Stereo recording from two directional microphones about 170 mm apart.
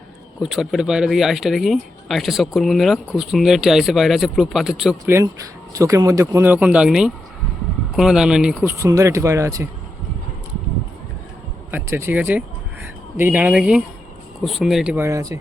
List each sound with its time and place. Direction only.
0.4 s speech: centre (ahead or behind)
5.0 s speech: 15° right (ahead or behind)
8.8 s speech: 15° right (ahead or behind)
11.7 s speech: 15° right (ahead or behind)
14.9 s speech: 15° right (ahead or behind)